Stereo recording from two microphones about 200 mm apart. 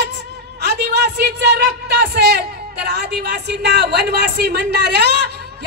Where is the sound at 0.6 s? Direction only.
55° right (ahead or behind).